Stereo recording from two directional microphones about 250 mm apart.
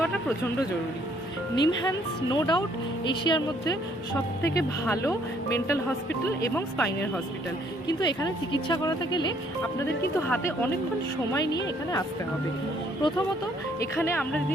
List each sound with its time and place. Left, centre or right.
1.5 s speech: centre